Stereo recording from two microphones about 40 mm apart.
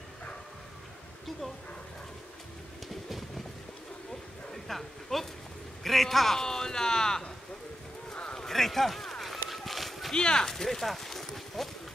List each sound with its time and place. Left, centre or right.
2.9 s train: centre
4.6 s a sound: centre
5.9 s a man's voice: centre
6.4 s speech: centre
8.1 s a sound: left
8.4 s run: centre
10.1 s speech: centre
10.5 s speech: centre